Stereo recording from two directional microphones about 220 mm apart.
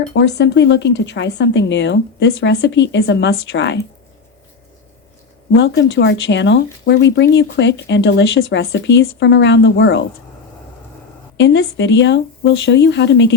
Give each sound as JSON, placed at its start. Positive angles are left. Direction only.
{"t": 0.1, "sound": "speech", "side_deg": 50}
{"t": 5.5, "sound": "speech", "side_deg": 55}
{"t": 11.3, "sound": "speech", "side_deg": 55}